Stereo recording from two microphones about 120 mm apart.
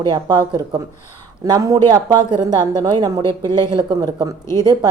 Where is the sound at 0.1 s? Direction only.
35° right (ahead or behind).